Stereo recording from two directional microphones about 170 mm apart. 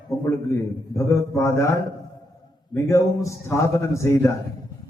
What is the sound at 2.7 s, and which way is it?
A man's voice, 20° left (ahead or behind).